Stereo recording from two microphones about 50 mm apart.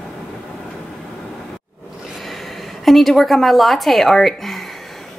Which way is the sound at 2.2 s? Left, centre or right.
Centre.